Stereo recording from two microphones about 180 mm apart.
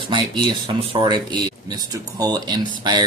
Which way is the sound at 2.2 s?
20° right (ahead or behind).